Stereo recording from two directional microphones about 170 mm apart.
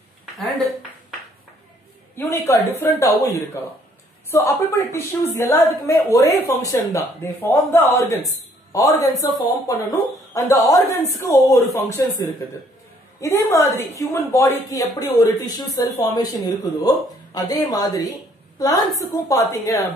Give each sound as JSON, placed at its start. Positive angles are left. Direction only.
{"t": 2.1, "sound": "a woman's voice", "side_deg": 15}